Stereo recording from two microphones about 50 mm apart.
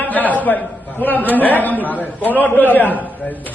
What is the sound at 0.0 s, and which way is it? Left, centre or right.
A man's voice, left.